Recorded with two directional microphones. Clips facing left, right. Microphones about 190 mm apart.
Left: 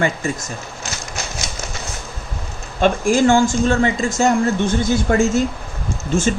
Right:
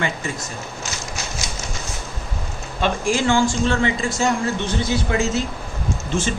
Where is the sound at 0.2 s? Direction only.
45° left (ahead or behind).